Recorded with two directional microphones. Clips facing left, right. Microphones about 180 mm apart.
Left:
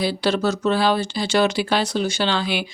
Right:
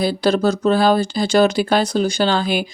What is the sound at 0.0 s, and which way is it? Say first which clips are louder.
Speech: right 4 dB; 45° right (ahead or behind).